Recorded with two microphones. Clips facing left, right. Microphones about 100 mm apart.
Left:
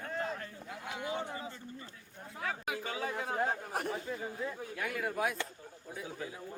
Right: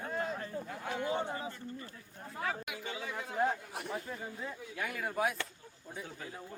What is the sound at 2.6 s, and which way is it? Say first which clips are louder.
Speech: left 4 dB; 40° left (ahead or behind).